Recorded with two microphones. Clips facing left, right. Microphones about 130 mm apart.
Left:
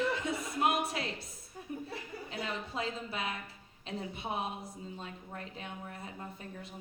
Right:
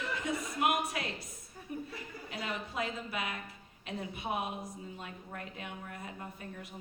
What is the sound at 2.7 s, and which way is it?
Speech, 25° left (ahead or behind).